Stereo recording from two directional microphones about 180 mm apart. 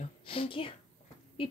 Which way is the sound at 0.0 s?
30° left (ahead or behind).